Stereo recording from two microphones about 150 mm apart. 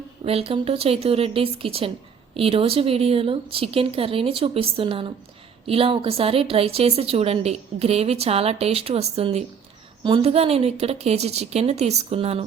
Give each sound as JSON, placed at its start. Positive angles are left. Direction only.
{"t": 0.3, "sound": "a woman's voice", "side_deg": -40}